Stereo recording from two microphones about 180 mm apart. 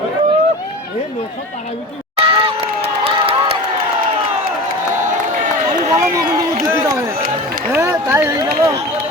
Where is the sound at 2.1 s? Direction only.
30° right (ahead or behind).